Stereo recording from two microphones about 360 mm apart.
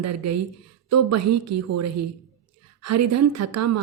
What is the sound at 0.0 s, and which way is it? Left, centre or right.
A woman's voice, right.